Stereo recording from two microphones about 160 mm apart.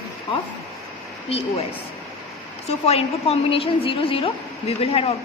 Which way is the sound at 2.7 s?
40° left (ahead or behind).